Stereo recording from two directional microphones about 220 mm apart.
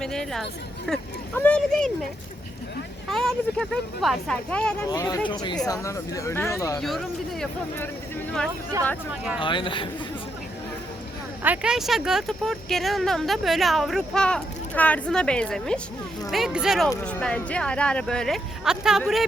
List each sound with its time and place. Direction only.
0.0 s a woman's voice: centre (ahead or behind)
3.1 s speech: centre (ahead or behind)
4.9 s speech: 15° left (ahead or behind)
6.7 s speech: centre (ahead or behind)
9.4 s speech: 20° left (ahead or behind)
11.4 s speech: 5° right (ahead or behind)